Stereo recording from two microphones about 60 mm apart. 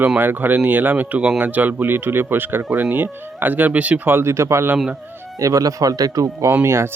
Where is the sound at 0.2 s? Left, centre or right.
Right.